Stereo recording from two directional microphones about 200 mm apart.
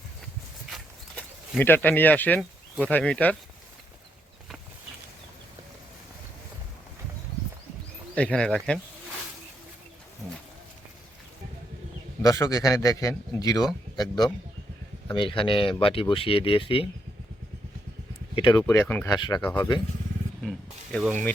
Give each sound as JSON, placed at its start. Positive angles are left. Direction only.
{"t": 0.7, "sound": "a sound", "side_deg": 5}
{"t": 8.1, "sound": "speech", "side_deg": 5}
{"t": 12.2, "sound": "a man's voice", "side_deg": 15}
{"t": 18.3, "sound": "speech", "side_deg": 25}
{"t": 18.6, "sound": "a man's voice", "side_deg": 10}
{"t": 20.9, "sound": "a man's voice", "side_deg": 5}